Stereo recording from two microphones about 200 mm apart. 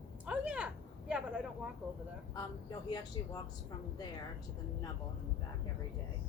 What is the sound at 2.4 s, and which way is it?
Speech, 20° left (ahead or behind).